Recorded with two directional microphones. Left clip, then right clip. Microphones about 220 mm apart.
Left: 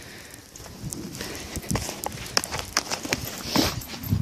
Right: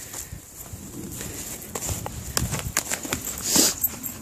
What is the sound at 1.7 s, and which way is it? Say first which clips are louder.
Clip-clop: left 3 dB; 10° left (ahead or behind).